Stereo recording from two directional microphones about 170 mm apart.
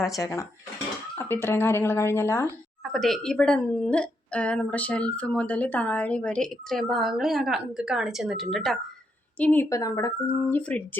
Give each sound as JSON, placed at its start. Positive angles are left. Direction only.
{"t": 0.0, "sound": "speech", "side_deg": 20}
{"t": 2.8, "sound": "a woman's voice", "side_deg": 0}